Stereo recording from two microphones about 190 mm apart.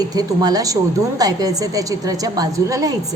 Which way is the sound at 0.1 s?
20° right (ahead or behind).